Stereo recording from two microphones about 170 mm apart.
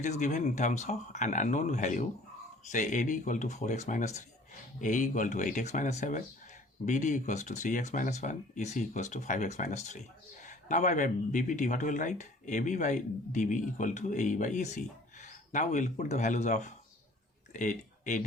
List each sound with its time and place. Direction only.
0.0 s speech: 45° left (ahead or behind)